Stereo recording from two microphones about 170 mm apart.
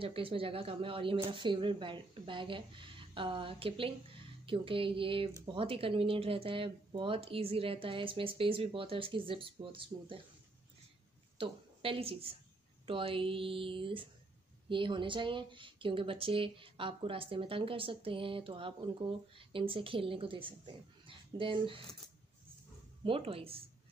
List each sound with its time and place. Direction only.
0.0 s speech: 30° right (ahead or behind)
11.3 s a woman's voice: 30° right (ahead or behind)
23.0 s speech: 30° right (ahead or behind)